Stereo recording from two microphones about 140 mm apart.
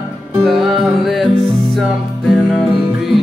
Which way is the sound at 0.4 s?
Centre (ahead or behind).